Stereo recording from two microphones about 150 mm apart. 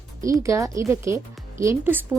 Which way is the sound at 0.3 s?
20° right (ahead or behind).